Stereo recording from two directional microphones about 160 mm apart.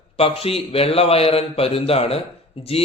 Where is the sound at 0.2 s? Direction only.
40° left (ahead or behind).